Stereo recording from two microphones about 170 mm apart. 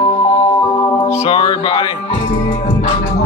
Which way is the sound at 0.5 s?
20° left (ahead or behind).